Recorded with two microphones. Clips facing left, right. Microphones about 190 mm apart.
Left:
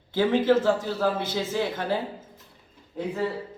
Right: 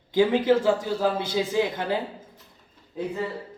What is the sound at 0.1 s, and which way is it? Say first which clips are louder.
A man's voice: right 1 dB; 15° right (ahead or behind).